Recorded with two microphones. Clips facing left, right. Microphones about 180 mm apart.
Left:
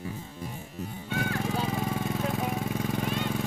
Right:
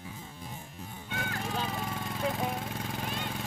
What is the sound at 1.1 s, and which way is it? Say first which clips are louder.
Music: left 6 dB; 50° left (ahead or behind).